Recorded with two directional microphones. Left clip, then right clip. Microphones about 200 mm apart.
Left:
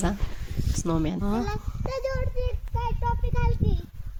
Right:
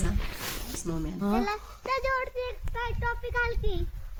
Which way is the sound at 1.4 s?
10° right (ahead or behind).